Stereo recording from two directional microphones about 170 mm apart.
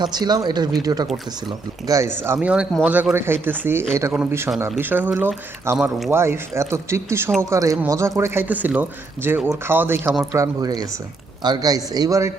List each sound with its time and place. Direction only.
0.0 s speech: 25° right (ahead or behind); by 6.1 s centre (ahead or behind)
6.1 s speech: 15° right (ahead or behind)